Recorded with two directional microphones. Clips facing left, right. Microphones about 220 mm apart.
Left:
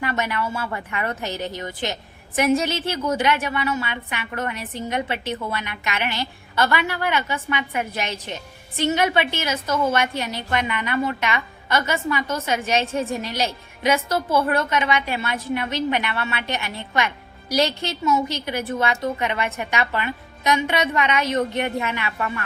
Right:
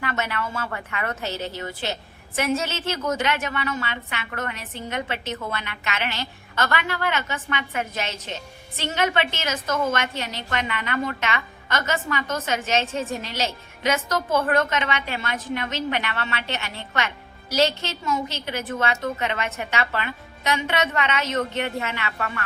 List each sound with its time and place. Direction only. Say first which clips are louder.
0.0 s a woman's voice: left 3 dB; 15° left (ahead or behind)